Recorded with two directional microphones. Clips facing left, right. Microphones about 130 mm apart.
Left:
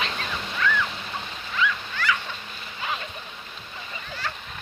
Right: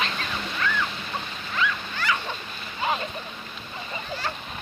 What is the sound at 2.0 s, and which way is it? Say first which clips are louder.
Dog: left 1 dB; 30° right (ahead or behind).